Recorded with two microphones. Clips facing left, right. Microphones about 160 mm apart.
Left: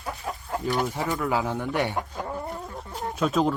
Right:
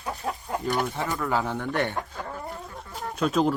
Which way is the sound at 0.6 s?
Centre (ahead or behind).